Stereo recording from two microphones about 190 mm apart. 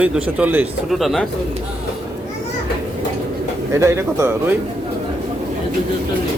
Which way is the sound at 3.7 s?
15° right (ahead or behind).